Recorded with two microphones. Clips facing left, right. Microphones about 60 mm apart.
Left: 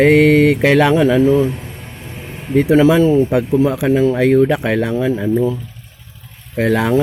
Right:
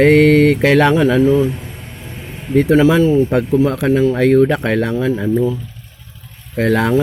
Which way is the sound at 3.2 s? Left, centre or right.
Centre.